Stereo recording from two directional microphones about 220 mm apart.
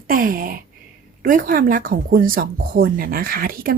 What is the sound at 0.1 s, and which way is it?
Speech, 40° right (ahead or behind).